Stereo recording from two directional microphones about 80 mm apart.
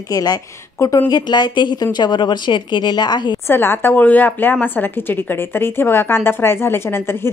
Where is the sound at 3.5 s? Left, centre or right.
Left.